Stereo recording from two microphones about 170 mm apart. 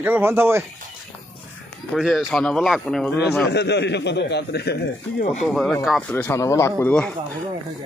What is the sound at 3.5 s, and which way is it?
Speech, 80° left.